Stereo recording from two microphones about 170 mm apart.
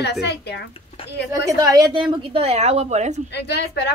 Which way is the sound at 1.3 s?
20° right (ahead or behind).